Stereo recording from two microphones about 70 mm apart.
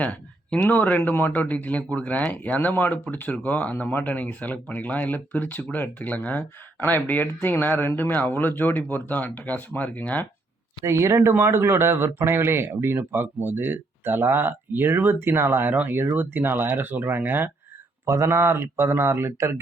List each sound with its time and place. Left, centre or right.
0.0 s speech: left
10.8 s speech: right
15.7 s speech: right
18.0 s speech: right